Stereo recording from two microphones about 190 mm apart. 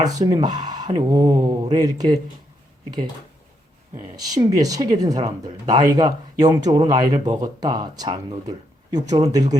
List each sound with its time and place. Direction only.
0.0 s speech: 20° right (ahead or behind)
3.9 s speech: 20° right (ahead or behind)